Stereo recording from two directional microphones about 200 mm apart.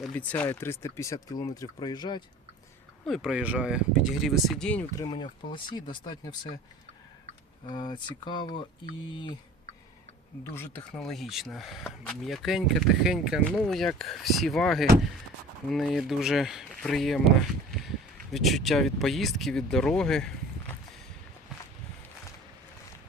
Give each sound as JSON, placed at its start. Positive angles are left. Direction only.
{"t": 0.0, "sound": "speech", "side_deg": 5}
{"t": 3.1, "sound": "speech", "side_deg": 0}
{"t": 4.9, "sound": "speech", "side_deg": 20}
{"t": 7.7, "sound": "speech", "side_deg": 20}
{"t": 10.5, "sound": "speech", "side_deg": 10}